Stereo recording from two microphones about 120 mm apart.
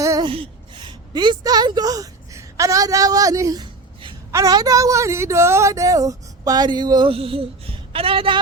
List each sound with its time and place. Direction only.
0.0 s a sound: 25° right (ahead or behind)
0.3 s a woman's voice: 45° right (ahead or behind)
7.1 s a woman's voice: 50° right (ahead or behind)